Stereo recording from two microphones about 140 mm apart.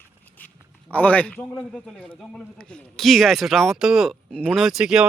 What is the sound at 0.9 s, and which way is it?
A man's voice, 10° left (ahead or behind).